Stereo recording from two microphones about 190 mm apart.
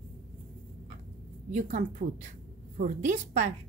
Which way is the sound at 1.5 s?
40° right (ahead or behind).